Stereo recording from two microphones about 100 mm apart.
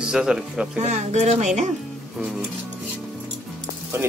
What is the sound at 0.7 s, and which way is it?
Speech, 90° right.